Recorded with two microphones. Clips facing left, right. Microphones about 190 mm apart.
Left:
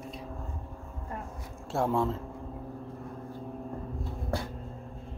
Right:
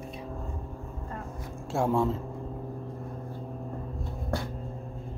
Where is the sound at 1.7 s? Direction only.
Centre (ahead or behind).